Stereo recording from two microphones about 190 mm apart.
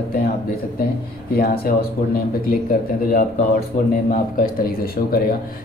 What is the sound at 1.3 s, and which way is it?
Speech, 55° left (ahead or behind).